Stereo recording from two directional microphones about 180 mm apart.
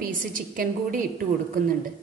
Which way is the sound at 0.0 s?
50° right (ahead or behind).